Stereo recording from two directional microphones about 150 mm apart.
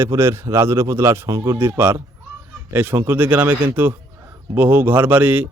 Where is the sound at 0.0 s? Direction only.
20° right (ahead or behind).